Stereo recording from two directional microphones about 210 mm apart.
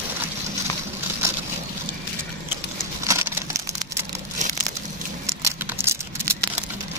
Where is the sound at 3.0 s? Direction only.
10° right (ahead or behind).